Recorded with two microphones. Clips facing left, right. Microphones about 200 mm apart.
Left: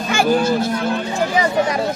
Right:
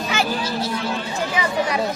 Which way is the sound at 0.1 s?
50° left (ahead or behind).